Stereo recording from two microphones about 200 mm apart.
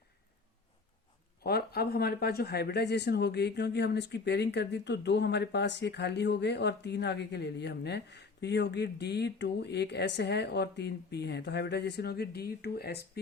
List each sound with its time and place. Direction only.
1.5 s speech: 50° left (ahead or behind)